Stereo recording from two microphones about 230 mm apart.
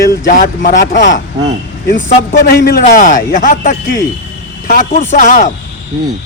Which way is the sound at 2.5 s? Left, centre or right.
Left.